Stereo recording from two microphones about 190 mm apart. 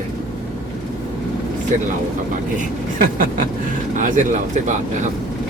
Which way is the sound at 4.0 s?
40° right (ahead or behind).